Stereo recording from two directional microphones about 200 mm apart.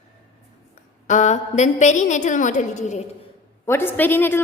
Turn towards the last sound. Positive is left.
turn(degrees=10)  # may be behind; listen again after turning